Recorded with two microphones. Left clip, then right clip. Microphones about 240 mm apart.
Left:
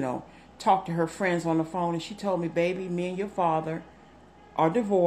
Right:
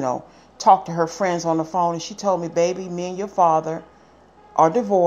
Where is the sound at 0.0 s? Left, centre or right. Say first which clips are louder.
Right 8 dB; centre.